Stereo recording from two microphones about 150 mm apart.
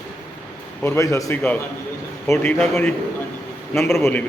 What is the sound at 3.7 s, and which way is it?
Speech, 15° left (ahead or behind).